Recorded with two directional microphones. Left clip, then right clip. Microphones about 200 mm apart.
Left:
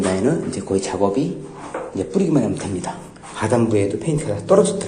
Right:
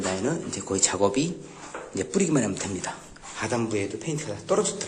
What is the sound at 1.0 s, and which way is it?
A man's voice, 25° right (ahead or behind).